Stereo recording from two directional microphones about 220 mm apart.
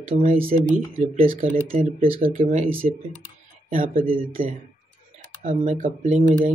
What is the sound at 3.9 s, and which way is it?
Speech, 40° right (ahead or behind).